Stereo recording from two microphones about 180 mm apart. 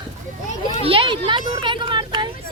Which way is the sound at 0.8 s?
30° right (ahead or behind).